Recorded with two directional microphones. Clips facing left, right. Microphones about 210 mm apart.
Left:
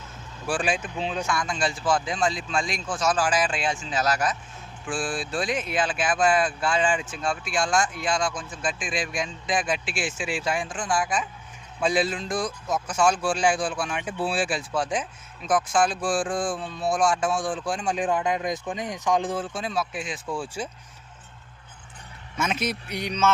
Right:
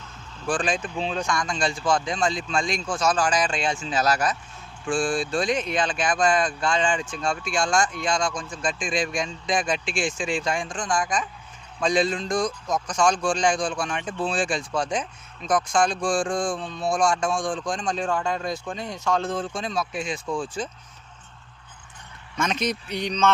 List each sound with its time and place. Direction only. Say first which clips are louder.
0.4 s speech: right 1 dB; 10° left (ahead or behind)
3.9 s speech: right 2 dB; 35° right (ahead or behind)
4.9 s speech: right 5 dB; 5° left (ahead or behind)
22.4 s a man's voice: right 2 dB; 5° left (ahead or behind)